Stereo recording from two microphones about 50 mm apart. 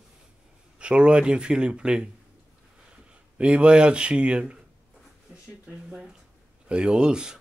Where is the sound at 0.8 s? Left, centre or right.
Right.